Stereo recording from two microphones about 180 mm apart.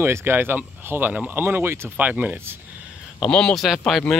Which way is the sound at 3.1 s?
5° left (ahead or behind).